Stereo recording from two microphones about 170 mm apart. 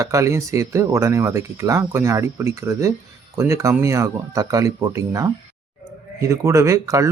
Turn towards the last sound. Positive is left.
turn(degrees=-20)  # may be behind; listen again after turning